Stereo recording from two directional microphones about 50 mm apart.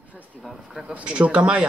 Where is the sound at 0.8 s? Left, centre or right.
Centre.